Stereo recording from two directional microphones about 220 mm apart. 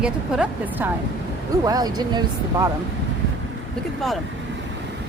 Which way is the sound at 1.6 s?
15° right (ahead or behind).